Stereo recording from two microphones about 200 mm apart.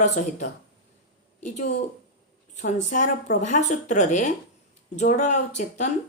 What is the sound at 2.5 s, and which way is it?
A woman's voice, 35° left (ahead or behind).